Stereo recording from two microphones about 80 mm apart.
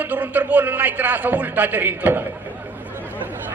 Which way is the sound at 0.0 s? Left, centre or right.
Right.